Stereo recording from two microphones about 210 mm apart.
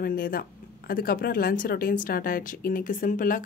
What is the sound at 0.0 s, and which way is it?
Speech, 45° left (ahead or behind).